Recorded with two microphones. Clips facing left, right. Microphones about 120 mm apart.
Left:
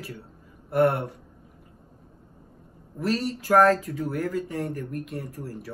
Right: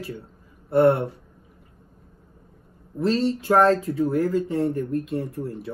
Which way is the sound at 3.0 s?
30° right (ahead or behind).